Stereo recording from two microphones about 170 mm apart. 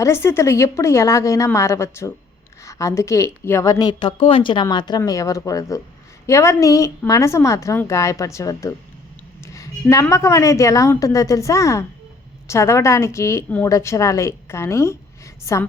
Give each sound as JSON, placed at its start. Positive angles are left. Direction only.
{"t": 0.0, "sound": "a woman's voice", "side_deg": 15}